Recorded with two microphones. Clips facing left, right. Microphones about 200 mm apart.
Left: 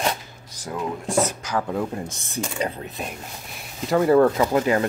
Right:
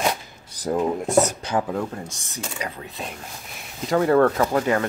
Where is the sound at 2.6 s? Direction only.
30° left (ahead or behind).